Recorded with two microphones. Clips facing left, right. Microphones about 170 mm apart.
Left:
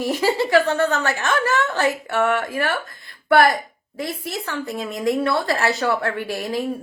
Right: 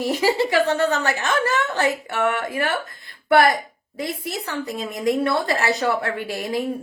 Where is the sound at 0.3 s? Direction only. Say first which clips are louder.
Left 1 dB; 20° right (ahead or behind).